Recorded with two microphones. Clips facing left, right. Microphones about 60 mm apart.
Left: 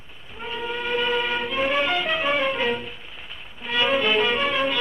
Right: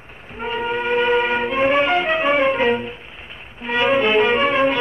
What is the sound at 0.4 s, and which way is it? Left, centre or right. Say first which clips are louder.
Music: right 7 dB; right.